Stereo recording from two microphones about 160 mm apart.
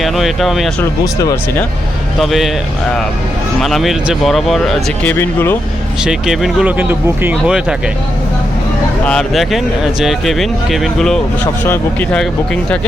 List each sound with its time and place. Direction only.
0.0 s speech: centre (ahead or behind)
0.8 s speech: 20° left (ahead or behind)
2.2 s speech: centre (ahead or behind)
3.6 s speech: centre (ahead or behind)
5.1 s speech: 15° left (ahead or behind)
6.0 s speech: 5° right (ahead or behind)
9.0 s speech: centre (ahead or behind)